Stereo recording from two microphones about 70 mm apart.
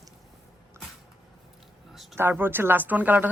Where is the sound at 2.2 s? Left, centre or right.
Right.